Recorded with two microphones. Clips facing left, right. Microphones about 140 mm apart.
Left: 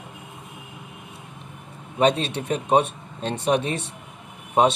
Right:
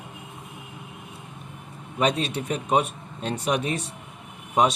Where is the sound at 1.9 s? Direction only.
30° left (ahead or behind).